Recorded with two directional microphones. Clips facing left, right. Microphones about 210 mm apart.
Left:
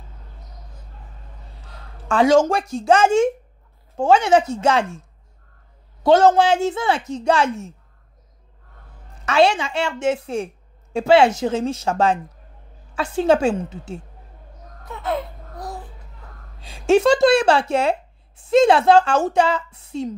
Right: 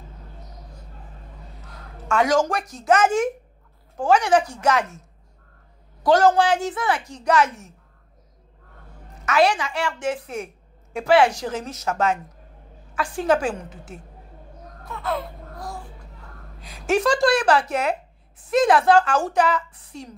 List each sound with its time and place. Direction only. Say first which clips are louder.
1.6 s a woman's voice: right 1 dB; 30° left (ahead or behind)
6.0 s a woman's voice: left 3 dB; 25° left (ahead or behind)
9.2 s a woman's voice: left 3 dB; 25° left (ahead or behind)
14.9 s baby cry: left 2 dB; 20° left (ahead or behind)
16.6 s a woman's voice: left 6 dB; 25° left (ahead or behind)